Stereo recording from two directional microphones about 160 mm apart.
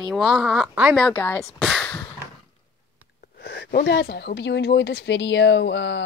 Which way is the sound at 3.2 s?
80° left.